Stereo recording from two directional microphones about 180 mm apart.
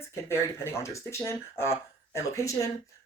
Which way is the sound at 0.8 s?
15° left (ahead or behind).